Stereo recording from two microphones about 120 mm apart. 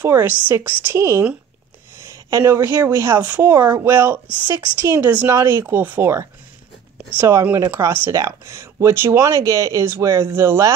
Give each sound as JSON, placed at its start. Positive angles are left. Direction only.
{"t": 0.0, "sound": "a woman's voice", "side_deg": -15}
{"t": 2.3, "sound": "speech", "side_deg": -25}